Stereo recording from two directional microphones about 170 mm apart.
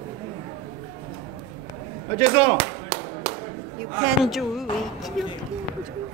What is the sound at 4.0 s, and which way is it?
Speech, centre (ahead or behind).